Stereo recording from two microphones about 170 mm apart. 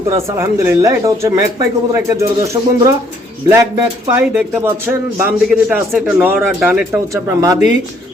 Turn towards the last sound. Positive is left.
turn(degrees=40)  # may be behind; listen again after turning